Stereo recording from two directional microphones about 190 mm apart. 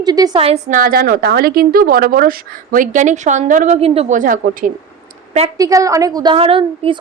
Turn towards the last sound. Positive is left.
turn(degrees=-30)  # may be behind; listen again after turning